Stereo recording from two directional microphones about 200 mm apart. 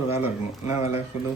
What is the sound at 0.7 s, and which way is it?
Speech, 30° left (ahead or behind).